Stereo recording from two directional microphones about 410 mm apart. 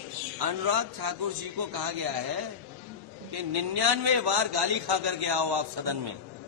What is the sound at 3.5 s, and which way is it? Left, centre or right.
A man's voice, right.